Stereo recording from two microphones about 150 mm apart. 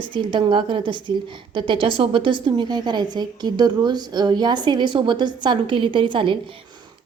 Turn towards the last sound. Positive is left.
turn(degrees=-35)  # may be behind; listen again after turning